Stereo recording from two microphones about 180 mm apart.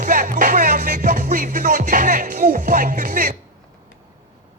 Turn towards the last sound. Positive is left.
turn(degrees=-45)  # may be behind; listen again after turning